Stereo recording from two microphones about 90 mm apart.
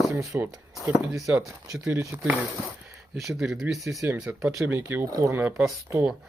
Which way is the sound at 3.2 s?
5° right (ahead or behind).